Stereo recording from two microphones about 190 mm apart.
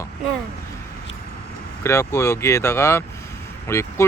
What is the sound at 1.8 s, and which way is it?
Speech, 15° left (ahead or behind).